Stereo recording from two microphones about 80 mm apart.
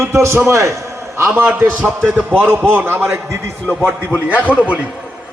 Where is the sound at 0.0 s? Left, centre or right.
Right.